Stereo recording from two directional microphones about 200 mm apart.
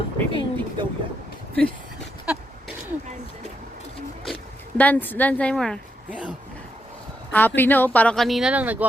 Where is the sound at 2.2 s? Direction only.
5° right (ahead or behind).